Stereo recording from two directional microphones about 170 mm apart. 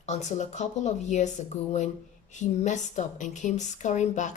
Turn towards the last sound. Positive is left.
turn(degrees=45)  # may be behind; listen again after turning